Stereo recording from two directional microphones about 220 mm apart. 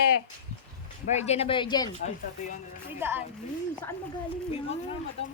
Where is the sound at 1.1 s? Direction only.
30° left (ahead or behind).